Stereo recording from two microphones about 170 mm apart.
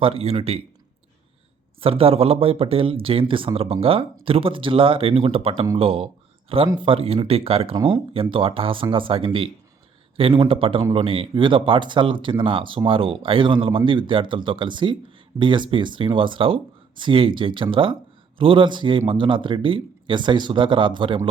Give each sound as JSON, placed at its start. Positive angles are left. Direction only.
{"t": 0.0, "sound": "speech", "side_deg": -35}
{"t": 1.8, "sound": "a man's voice", "side_deg": -35}